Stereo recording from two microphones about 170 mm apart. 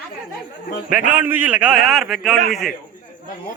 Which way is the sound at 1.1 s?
10° right (ahead or behind).